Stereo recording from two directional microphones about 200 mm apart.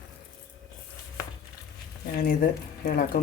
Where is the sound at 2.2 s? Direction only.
45° left (ahead or behind).